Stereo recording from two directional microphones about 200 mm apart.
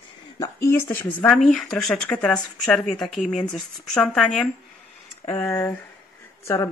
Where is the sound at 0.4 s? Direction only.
15° left (ahead or behind).